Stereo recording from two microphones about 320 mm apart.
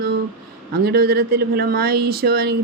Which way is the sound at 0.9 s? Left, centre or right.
Right.